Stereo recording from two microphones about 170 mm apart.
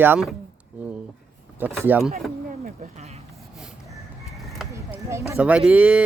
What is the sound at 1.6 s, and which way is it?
Speech, 10° right (ahead or behind).